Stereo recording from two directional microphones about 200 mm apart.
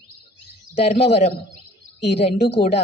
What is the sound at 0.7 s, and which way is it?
A woman's voice, 30° left (ahead or behind).